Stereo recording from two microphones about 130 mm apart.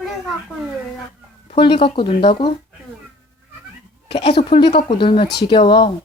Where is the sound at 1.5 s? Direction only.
45° left (ahead or behind).